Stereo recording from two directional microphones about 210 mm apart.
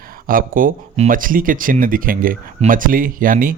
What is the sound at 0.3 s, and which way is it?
Speech, 40° right (ahead or behind).